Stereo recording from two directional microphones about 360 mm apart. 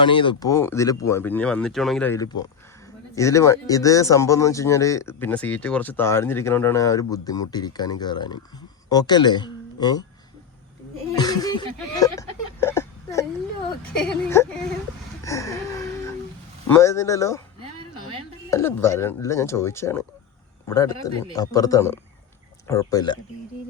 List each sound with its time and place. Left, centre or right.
0.0 s speech: centre
11.1 s a sound: centre
14.3 s speech: centre
15.2 s a sound: centre
16.6 s speech: centre
18.5 s speech: centre